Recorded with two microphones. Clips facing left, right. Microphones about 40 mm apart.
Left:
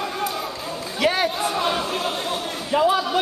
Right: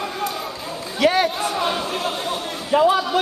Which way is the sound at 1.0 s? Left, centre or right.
Centre.